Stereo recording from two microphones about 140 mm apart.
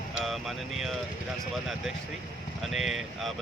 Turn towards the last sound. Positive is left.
turn(degrees=0)  # may be behind; listen again after turning